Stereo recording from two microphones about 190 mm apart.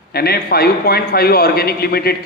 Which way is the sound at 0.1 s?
55° left (ahead or behind).